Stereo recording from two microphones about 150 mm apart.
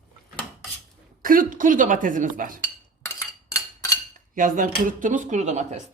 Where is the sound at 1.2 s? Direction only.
70° right (ahead or behind).